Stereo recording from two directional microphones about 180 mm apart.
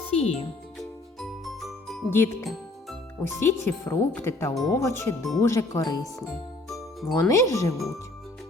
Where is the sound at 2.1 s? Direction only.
15° left (ahead or behind).